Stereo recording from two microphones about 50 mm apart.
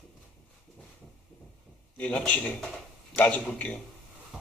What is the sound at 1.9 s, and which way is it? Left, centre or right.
A man's voice, left.